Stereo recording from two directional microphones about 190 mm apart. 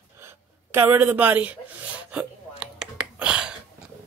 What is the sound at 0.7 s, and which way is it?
Speech, 10° right (ahead or behind).